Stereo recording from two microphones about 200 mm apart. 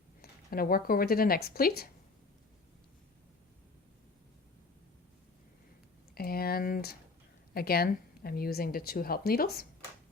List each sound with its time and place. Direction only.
0.2 s speech: 50° left (ahead or behind)
6.1 s speech: 50° left (ahead or behind)